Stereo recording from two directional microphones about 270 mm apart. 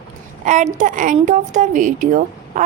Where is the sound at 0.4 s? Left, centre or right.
Right.